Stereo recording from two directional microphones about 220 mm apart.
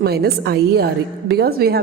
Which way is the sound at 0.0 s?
45° right (ahead or behind).